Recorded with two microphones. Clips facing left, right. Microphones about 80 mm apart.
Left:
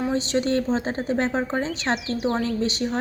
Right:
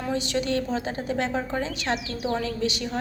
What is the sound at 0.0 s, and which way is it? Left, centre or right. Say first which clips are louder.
A woman's voice: left 4 dB; left.